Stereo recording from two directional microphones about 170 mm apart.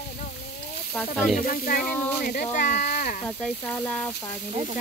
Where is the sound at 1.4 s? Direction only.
55° left (ahead or behind).